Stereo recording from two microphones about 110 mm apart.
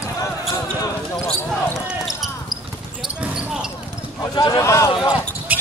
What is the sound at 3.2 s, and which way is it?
Basketball bounce, 5° right (ahead or behind).